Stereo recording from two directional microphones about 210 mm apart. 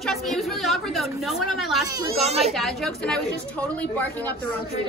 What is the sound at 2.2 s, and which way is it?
Speech, 30° right (ahead or behind).